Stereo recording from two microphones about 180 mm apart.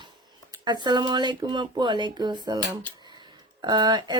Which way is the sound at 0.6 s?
25° right (ahead or behind).